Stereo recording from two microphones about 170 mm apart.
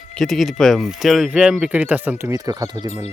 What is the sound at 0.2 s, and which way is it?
Speech, centre (ahead or behind).